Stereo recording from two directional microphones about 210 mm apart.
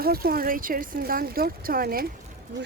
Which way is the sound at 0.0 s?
45° right (ahead or behind).